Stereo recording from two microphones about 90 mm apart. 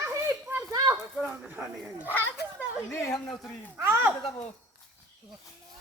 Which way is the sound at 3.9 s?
20° right (ahead or behind).